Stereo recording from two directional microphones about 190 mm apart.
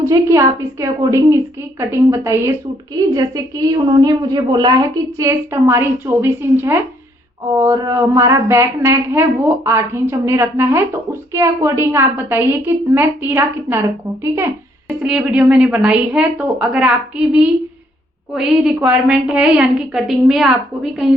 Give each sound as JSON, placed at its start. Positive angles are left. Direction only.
{"t": 0.0, "sound": "a woman's voice", "side_deg": -15}